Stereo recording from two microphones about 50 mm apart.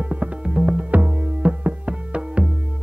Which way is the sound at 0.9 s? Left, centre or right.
Right.